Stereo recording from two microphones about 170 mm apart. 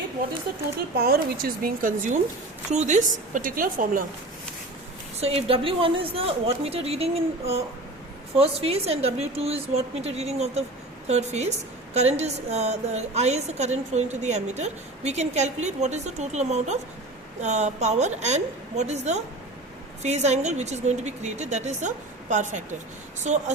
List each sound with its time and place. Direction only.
0.9 s speech: 65° right (ahead or behind)
2.6 s a woman's voice: 45° right (ahead or behind)
5.2 s a woman's voice: 35° right (ahead or behind)